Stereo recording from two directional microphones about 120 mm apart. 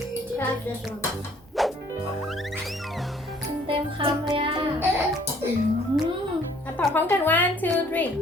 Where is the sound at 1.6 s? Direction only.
Centre (ahead or behind).